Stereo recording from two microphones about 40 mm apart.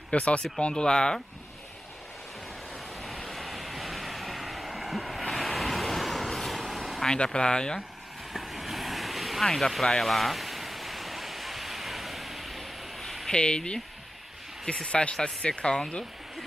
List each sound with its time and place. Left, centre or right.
0.1 s speech: left
3.0 s vehicle: centre
7.3 s speech: left
8.3 s vehicle: centre
9.4 s speech: centre
9.9 s a sound: centre
13.3 s speech: left